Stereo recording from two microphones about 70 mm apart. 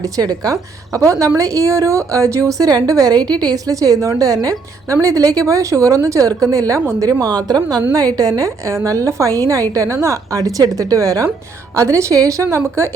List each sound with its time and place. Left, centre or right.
0.0 s a woman's voice: right
0.5 s a woman's voice: right
7.0 s a woman's voice: right